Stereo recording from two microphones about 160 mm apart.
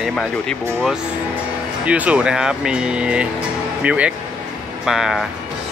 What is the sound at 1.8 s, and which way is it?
Speech, 10° right (ahead or behind).